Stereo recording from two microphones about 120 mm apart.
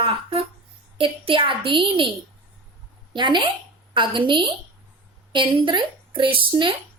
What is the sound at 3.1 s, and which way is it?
A woman's voice, 40° right (ahead or behind).